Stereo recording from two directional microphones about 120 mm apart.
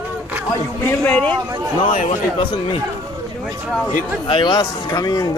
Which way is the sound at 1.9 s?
90° left.